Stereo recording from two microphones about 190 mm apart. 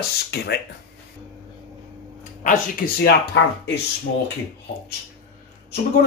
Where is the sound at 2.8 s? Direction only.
45° left (ahead or behind).